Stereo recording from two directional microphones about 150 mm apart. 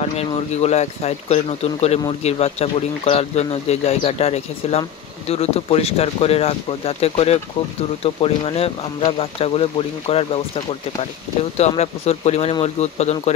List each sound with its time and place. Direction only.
0.0 s speech: 45° left (ahead or behind)